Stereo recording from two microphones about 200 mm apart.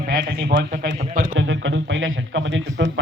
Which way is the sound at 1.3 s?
70° right (ahead or behind).